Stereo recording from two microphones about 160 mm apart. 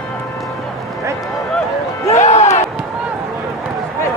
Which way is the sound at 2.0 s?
45° left (ahead or behind).